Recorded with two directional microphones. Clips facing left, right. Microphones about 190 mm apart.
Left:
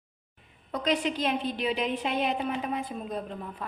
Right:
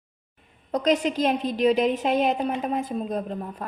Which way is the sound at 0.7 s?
45° right (ahead or behind).